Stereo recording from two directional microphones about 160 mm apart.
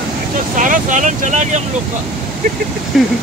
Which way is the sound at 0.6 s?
55° right (ahead or behind).